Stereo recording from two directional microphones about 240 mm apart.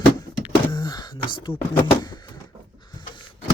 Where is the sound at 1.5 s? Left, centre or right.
Centre.